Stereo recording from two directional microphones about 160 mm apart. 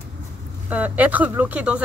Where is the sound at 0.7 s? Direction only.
10° right (ahead or behind).